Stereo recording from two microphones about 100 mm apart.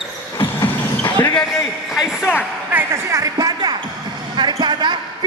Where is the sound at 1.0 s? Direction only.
20° left (ahead or behind).